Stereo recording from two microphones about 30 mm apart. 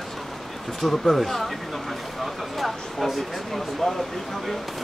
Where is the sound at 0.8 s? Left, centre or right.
Centre.